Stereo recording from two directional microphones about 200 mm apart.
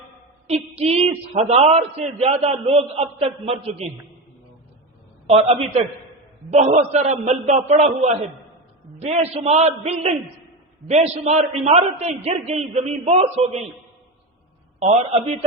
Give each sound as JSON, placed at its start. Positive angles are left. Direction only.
{"t": 0.4, "sound": "a man's voice", "side_deg": -30}
{"t": 5.2, "sound": "a man's voice", "side_deg": -30}